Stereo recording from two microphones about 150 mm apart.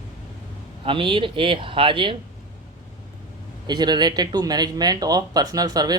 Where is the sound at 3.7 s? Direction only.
30° right (ahead or behind).